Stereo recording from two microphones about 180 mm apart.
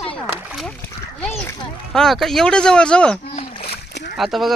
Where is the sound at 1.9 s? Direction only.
Centre (ahead or behind).